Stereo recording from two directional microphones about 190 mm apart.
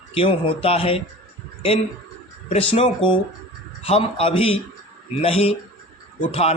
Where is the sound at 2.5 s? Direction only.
30° left (ahead or behind).